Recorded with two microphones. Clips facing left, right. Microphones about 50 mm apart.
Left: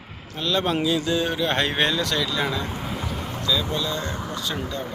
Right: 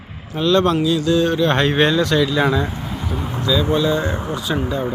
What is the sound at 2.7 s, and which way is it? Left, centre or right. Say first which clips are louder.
Vehicle: right 3 dB; centre.